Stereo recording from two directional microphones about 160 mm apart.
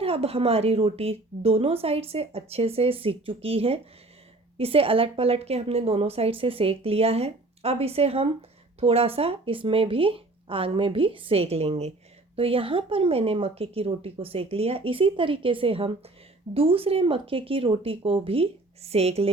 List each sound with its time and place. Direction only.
0.0 s a woman's voice: 35° right (ahead or behind)